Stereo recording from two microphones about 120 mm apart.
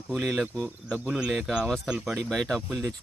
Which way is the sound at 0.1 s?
Centre (ahead or behind).